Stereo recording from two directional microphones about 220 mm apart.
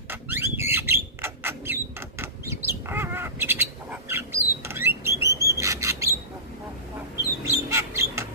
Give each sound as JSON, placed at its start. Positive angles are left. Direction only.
{"t": 0.1, "sound": "bird", "side_deg": -10}
{"t": 7.4, "sound": "bird", "side_deg": -15}